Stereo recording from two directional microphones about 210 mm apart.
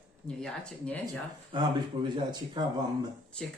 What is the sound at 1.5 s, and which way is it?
Speech, 20° right (ahead or behind).